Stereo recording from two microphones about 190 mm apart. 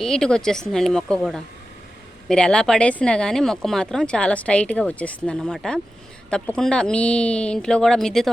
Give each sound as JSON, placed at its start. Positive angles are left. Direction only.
{"t": 0.0, "sound": "speech", "side_deg": 5}